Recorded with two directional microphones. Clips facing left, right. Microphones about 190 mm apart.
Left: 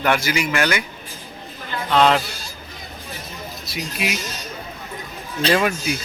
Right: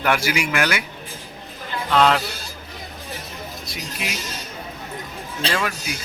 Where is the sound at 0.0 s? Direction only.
10° right (ahead or behind).